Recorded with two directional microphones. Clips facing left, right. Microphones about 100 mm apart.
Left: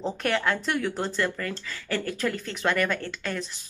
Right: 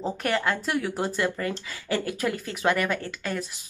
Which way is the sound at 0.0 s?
5° right (ahead or behind).